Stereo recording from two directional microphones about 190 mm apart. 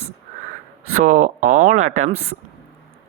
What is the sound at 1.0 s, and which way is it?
Speech, 40° right (ahead or behind).